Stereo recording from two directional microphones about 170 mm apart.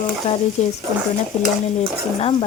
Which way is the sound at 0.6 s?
40° left (ahead or behind).